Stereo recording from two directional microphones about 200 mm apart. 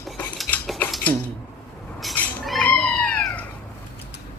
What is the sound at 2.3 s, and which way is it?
Cat, 5° left (ahead or behind).